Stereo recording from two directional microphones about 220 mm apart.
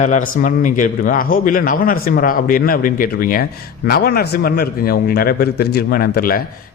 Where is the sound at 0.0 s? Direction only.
35° left (ahead or behind).